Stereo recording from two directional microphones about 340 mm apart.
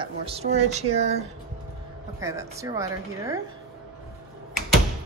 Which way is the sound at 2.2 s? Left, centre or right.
Centre.